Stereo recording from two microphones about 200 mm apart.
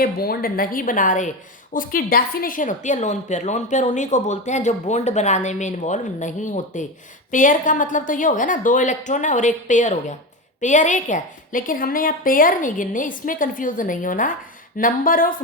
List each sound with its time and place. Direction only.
0.0 s a woman's voice: 50° left (ahead or behind)